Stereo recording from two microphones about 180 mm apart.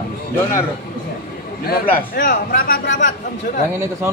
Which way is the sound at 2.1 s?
50° left (ahead or behind).